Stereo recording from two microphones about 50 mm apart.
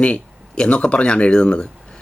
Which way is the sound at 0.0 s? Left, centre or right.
Left.